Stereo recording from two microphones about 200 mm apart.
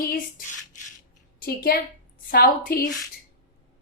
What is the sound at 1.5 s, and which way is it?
A woman's voice, 50° left (ahead or behind).